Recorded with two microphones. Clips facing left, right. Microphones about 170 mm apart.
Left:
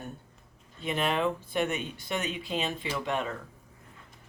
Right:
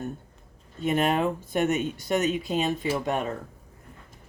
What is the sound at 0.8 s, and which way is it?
Speech, 45° right (ahead or behind).